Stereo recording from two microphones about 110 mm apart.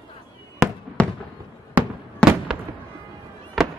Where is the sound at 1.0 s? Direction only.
10° left (ahead or behind).